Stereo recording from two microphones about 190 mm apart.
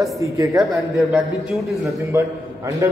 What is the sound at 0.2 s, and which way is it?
Speech, 15° right (ahead or behind).